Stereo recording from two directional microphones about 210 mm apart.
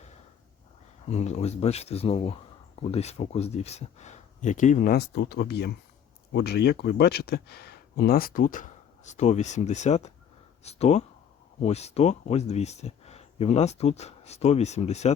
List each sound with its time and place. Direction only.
1.0 s a man's voice: 30° left (ahead or behind)